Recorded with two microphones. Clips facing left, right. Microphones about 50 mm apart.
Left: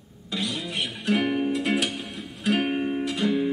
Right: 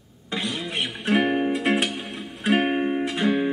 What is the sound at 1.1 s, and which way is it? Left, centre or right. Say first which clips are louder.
Music: right 3 dB; right.